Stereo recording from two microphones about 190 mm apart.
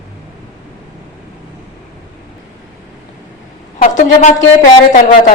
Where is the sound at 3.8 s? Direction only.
40° left (ahead or behind).